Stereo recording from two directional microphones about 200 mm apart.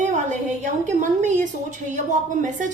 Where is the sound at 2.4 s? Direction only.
40° right (ahead or behind).